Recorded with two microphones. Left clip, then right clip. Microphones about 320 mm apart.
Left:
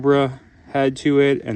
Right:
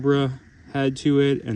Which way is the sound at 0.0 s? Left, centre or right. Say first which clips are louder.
Left 5 dB; centre.